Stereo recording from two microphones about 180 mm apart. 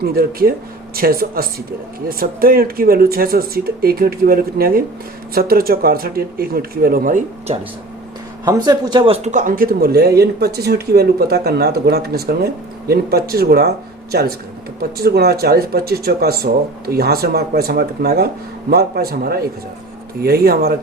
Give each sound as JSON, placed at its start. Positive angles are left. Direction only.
{"t": 0.0, "sound": "speech", "side_deg": -55}
{"t": 8.4, "sound": "speech", "side_deg": -20}